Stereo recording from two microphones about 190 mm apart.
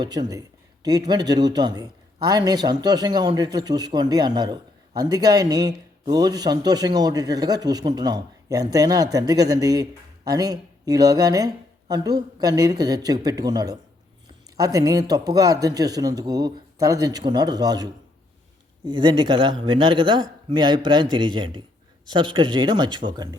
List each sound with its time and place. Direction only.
0.0 s a man's voice: 20° right (ahead or behind)